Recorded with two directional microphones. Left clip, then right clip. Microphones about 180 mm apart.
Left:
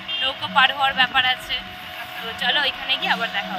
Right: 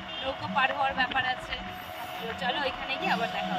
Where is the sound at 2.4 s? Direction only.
Centre (ahead or behind).